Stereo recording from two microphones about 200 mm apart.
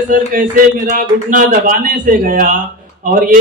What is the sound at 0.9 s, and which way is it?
A man's voice, 45° right (ahead or behind).